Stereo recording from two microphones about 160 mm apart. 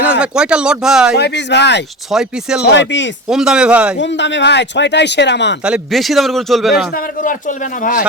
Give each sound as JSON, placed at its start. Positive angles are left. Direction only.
{"t": 0.1, "sound": "a man's voice", "side_deg": -5}
{"t": 1.1, "sound": "speech", "side_deg": 90}
{"t": 2.0, "sound": "a man's voice", "side_deg": -5}
{"t": 3.9, "sound": "speech", "side_deg": 90}
{"t": 5.6, "sound": "a man's voice", "side_deg": -5}
{"t": 6.9, "sound": "speech", "side_deg": 55}